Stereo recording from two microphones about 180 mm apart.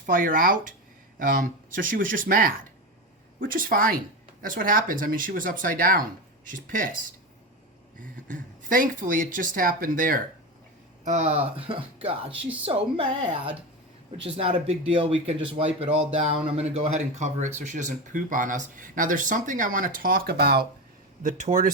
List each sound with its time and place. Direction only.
0.0 s speech: 50° right (ahead or behind)
11.0 s speech: 40° right (ahead or behind); by 20.7 s 60° right (ahead or behind)
21.2 s speech: 45° right (ahead or behind)